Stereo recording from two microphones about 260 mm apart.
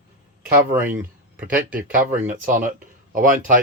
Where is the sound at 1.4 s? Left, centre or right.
Right.